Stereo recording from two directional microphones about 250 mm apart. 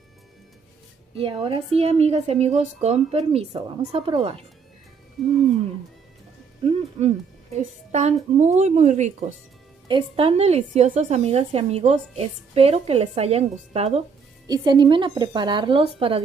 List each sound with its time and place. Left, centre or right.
1.1 s a woman's voice: right
6.7 s a woman's voice: right